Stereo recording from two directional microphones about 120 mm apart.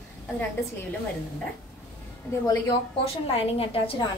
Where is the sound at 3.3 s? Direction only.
50° left (ahead or behind).